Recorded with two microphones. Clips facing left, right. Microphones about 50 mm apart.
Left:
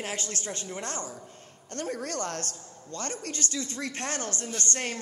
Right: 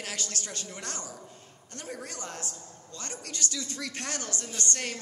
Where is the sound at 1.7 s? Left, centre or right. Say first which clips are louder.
Left 7 dB; left.